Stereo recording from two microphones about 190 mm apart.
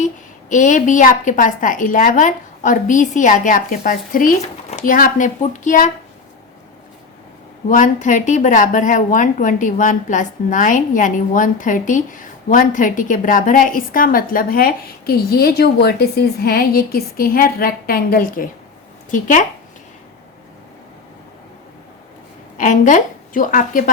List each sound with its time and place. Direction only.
0.5 s a woman's voice: 40° left (ahead or behind)
7.7 s a woman's voice: 40° left (ahead or behind)
22.5 s a woman's voice: 40° left (ahead or behind)